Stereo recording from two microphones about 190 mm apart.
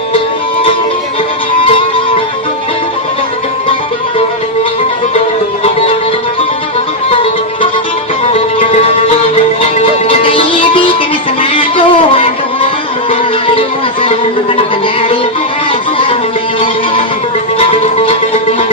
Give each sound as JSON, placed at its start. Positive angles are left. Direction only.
{"t": 5.6, "sound": "music", "side_deg": 30}
{"t": 8.3, "sound": "music", "side_deg": 30}
{"t": 11.5, "sound": "music", "side_deg": 25}
{"t": 14.0, "sound": "music", "side_deg": 30}
{"t": 17.6, "sound": "music", "side_deg": 30}